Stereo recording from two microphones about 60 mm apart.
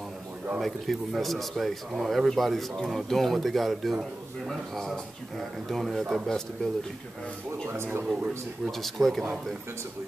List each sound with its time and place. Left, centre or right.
0.6 s speech: centre
6.2 s speech: centre
7.6 s speech: right
8.7 s speech: centre